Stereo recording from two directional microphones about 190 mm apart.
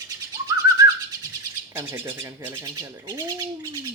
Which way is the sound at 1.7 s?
10° right (ahead or behind).